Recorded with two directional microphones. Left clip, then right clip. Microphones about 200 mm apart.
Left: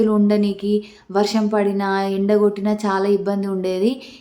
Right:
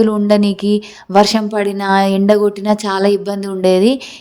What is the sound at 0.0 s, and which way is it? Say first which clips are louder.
A woman's voice: right 5 dB; 35° right (ahead or behind).